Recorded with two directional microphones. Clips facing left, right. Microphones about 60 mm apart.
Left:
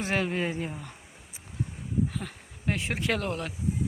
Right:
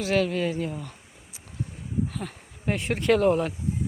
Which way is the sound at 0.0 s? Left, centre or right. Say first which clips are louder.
Right 4 dB; left.